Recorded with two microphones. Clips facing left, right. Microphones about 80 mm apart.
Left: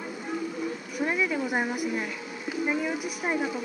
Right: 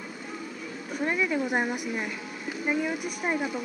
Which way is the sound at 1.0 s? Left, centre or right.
Centre.